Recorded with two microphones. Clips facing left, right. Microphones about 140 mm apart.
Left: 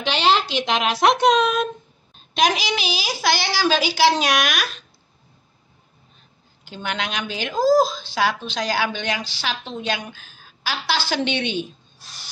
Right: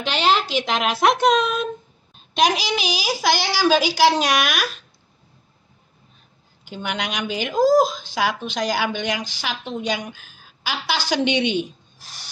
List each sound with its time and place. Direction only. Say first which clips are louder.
0.0 s speech: left 1 dB; 5° right (ahead or behind)
6.7 s speech: even; 10° right (ahead or behind)